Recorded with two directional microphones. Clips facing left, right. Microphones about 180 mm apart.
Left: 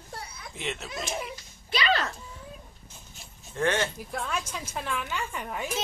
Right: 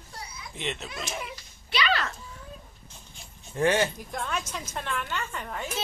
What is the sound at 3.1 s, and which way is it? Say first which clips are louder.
Dog: even; centre (ahead or behind).